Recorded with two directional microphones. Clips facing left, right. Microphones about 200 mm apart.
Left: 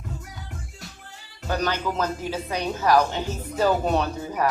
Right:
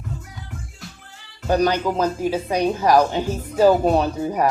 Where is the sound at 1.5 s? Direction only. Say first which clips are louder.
Right 7 dB; 15° right (ahead or behind).